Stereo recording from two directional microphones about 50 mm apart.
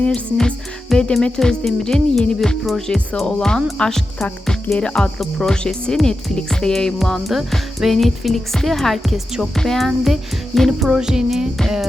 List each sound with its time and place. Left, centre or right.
0.0 s speech: centre
7.3 s speech: centre
10.7 s music: centre